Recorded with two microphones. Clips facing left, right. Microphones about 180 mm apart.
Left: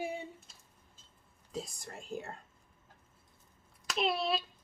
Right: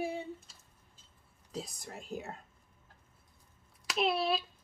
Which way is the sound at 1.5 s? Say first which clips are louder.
Even; centre (ahead or behind).